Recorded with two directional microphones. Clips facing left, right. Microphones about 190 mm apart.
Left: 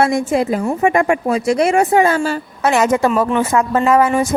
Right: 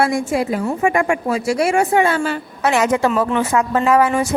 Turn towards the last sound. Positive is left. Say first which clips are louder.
# left 1 dB
turn(degrees=45)  # may be behind; listen again after turning